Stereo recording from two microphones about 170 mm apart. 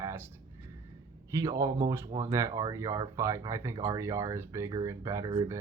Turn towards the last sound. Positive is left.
turn(degrees=-20)  # may be behind; listen again after turning